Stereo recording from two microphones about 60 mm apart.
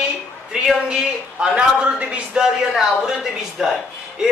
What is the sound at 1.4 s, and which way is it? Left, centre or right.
A man's voice, centre.